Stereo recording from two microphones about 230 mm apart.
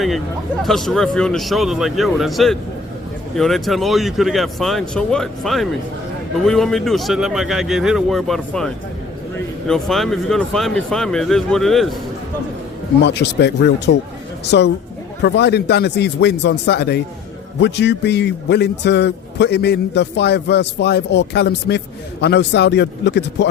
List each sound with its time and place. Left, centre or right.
0.6 s speech: centre
13.0 s a man's voice: left